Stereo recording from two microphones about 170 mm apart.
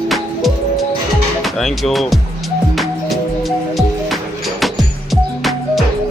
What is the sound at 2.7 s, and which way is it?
Music, centre (ahead or behind).